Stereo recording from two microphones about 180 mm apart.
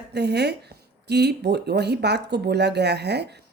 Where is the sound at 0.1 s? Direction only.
70° right (ahead or behind).